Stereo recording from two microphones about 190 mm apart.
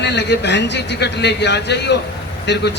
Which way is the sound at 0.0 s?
65° left (ahead or behind).